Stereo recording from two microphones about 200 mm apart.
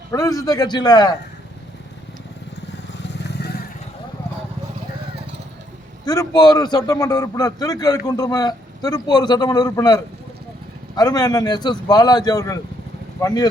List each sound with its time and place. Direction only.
0.1 s a man's voice: 15° left (ahead or behind)
3.0 s vehicle: 55° left (ahead or behind)
6.1 s a man's voice: 20° left (ahead or behind)